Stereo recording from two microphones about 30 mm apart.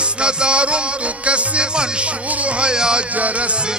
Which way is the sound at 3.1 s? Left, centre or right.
Right.